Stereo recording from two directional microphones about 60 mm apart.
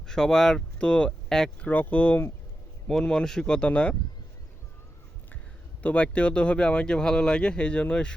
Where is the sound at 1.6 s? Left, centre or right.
Left.